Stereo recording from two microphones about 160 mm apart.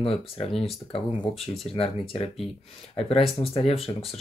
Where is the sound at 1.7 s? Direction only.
35° left (ahead or behind).